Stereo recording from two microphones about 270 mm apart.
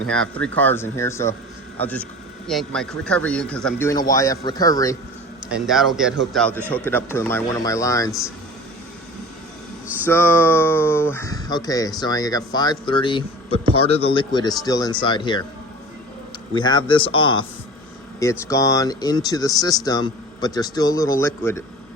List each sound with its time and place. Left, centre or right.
0.0 s speech: centre
5.5 s speech: centre
10.1 s speech: centre
16.6 s speech: centre